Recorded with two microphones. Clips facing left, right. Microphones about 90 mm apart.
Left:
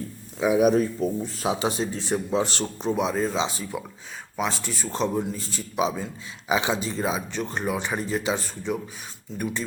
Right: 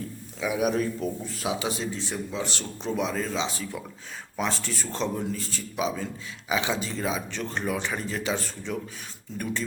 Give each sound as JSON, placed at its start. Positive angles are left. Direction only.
{"t": 0.3, "sound": "a man's voice", "side_deg": 30}
{"t": 1.9, "sound": "a man's voice", "side_deg": 50}
{"t": 2.8, "sound": "speech", "side_deg": 20}